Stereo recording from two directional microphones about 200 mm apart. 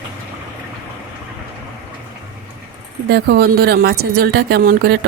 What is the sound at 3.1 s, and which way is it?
Speech, 55° right (ahead or behind).